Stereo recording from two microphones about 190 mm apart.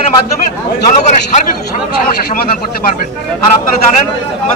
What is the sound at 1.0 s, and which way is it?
Speech, 40° left (ahead or behind).